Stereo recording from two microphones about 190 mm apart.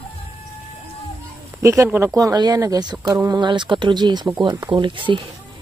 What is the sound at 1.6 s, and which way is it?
Speech, 15° right (ahead or behind).